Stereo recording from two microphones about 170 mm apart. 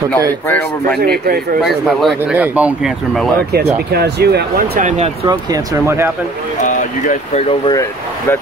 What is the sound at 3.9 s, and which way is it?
Speech, 70° right (ahead or behind).